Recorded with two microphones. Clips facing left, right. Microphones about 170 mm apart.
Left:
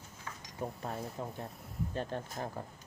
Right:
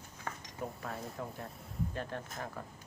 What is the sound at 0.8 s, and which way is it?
Speech, 25° left (ahead or behind).